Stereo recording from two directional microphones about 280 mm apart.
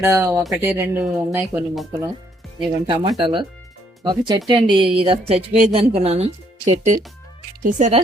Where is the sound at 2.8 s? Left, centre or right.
Centre.